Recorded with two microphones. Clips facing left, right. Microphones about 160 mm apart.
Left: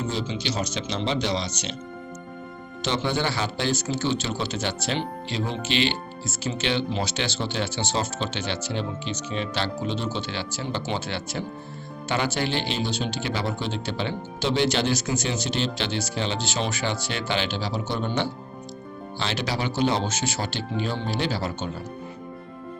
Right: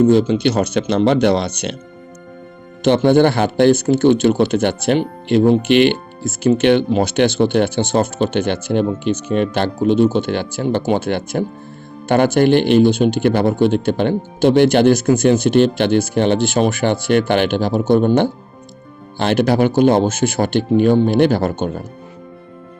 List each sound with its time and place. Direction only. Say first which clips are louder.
0.0 s speech: right 16 dB; 55° right (ahead or behind)
2.8 s speech: right 14 dB; 55° right (ahead or behind)